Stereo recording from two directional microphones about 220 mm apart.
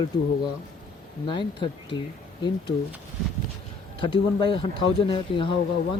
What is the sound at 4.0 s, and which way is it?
Speech, 25° left (ahead or behind).